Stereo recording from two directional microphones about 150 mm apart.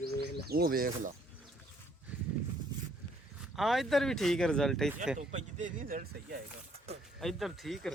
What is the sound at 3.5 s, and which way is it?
Speech, centre (ahead or behind).